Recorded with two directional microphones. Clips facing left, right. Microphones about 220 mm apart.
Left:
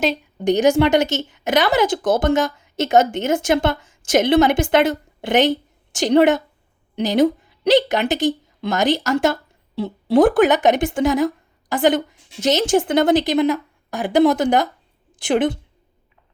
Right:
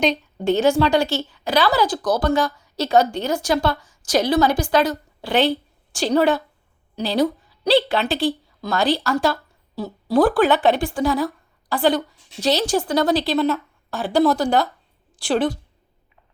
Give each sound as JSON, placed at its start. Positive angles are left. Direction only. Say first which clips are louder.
{"t": 0.4, "sound": "a woman's voice", "louder": "left 2 dB", "side_deg": 15}